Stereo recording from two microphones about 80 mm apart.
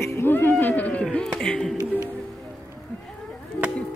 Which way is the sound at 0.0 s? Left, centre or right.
Left.